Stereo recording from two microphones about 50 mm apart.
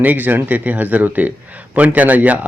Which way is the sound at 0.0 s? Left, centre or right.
Right.